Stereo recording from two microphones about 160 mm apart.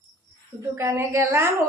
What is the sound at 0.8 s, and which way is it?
Speech, 15° right (ahead or behind).